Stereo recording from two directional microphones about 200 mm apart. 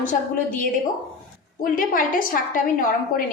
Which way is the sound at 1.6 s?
45° left (ahead or behind).